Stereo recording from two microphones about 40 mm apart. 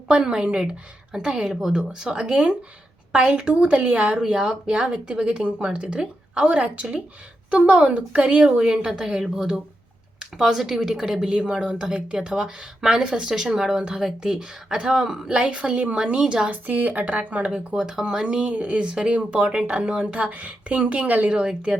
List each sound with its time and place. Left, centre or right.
0.2 s a woman's voice: centre; by 4.1 s right
4.1 s a woman's voice: centre
8.7 s a woman's voice: centre
14.0 s a woman's voice: centre
15.7 s a woman's voice: right
16.2 s a woman's voice: centre
16.5 s a woman's voice: right
17.7 s a woman's voice: right